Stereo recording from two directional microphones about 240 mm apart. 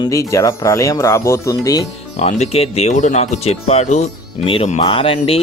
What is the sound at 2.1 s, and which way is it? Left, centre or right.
Speech, left.